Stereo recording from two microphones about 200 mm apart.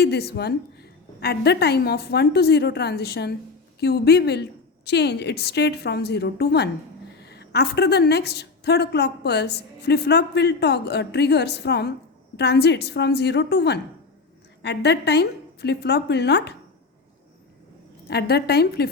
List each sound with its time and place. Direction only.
0.0 s a woman's voice: 55° left (ahead or behind)
18.1 s a woman's voice: 55° left (ahead or behind)